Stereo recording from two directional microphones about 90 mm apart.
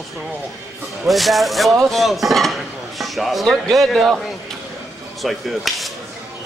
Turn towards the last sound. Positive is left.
turn(degrees=0)  # may be behind; listen again after turning